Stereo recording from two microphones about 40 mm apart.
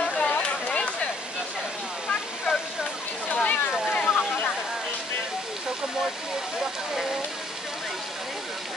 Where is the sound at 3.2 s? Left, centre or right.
Left.